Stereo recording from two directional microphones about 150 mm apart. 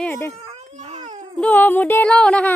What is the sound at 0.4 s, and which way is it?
Baby cry, 50° right (ahead or behind).